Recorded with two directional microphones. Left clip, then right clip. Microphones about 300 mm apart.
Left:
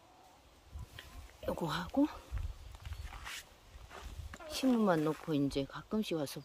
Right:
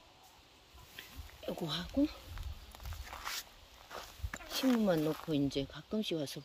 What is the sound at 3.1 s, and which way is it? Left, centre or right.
Walk, centre.